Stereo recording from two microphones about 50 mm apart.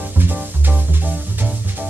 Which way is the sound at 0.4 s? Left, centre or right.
Right.